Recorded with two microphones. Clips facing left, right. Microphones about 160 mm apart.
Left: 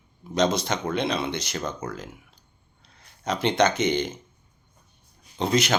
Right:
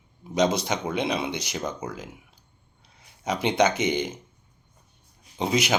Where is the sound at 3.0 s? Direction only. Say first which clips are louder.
Left 1 dB; 10° right (ahead or behind).